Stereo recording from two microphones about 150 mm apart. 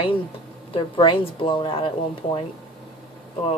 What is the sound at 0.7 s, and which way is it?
A woman's voice, 35° left (ahead or behind).